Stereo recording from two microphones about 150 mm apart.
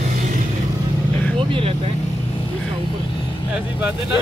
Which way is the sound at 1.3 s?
35° right (ahead or behind).